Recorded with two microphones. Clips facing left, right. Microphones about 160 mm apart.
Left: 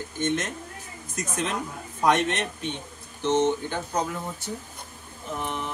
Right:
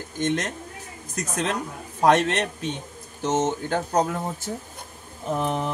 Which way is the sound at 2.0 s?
35° right (ahead or behind).